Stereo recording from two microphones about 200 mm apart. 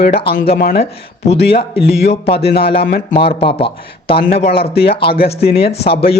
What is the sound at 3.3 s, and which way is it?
Speech, 30° left (ahead or behind).